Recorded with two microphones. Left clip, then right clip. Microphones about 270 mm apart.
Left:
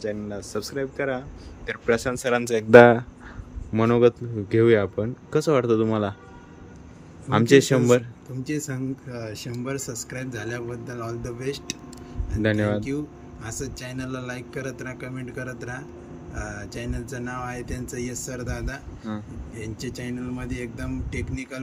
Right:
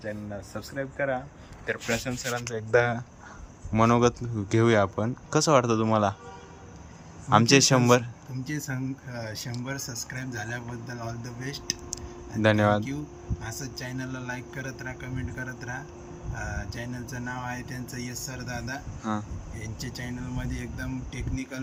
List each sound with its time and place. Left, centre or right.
0.0 s speech: centre
2.0 s speech: left
3.7 s speech: centre
7.3 s speech: centre